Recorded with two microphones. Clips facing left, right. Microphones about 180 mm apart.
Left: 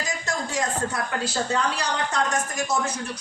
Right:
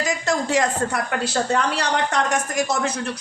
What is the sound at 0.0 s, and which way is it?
Speech, 75° right (ahead or behind).